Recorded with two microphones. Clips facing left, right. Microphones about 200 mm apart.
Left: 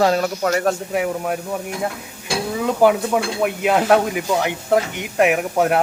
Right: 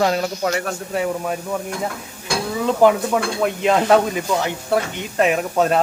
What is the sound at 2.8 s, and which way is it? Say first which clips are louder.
Speech: even; 10° left (ahead or behind).